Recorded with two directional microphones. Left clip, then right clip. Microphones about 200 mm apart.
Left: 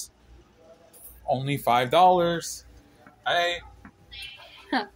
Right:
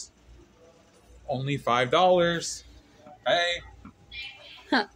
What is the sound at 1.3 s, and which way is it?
Speech, 25° left (ahead or behind).